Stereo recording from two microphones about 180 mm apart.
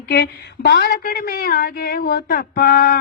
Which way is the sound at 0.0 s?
65° left (ahead or behind).